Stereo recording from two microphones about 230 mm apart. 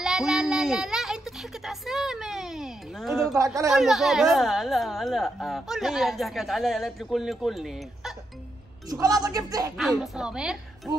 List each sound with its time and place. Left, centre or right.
0.0 s child singing: centre
1.7 s a sound: centre
3.3 s a man's voice: centre
3.7 s speech: centre
8.9 s a man's voice: centre
9.8 s speech: centre